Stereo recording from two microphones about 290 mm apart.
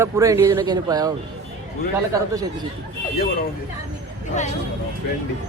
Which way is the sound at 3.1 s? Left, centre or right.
Left.